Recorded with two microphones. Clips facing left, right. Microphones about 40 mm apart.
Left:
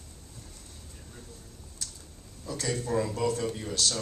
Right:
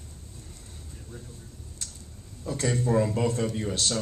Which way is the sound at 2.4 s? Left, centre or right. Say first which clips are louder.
Right 5 dB; right.